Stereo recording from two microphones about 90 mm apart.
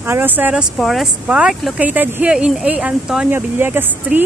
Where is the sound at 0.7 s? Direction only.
Centre (ahead or behind).